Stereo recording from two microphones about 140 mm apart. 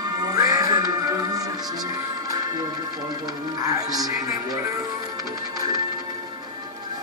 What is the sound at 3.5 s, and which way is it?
Speech, 25° right (ahead or behind).